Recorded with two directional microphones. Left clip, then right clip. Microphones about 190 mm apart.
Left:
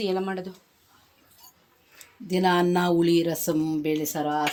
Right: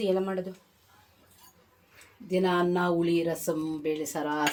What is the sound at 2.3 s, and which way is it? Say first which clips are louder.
Speech: left 4 dB; 70° left (ahead or behind).